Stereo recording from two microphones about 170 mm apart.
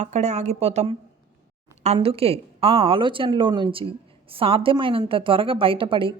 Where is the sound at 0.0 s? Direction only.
40° right (ahead or behind).